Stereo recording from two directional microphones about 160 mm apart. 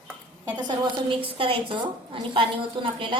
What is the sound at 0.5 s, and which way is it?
A woman's voice, 30° right (ahead or behind).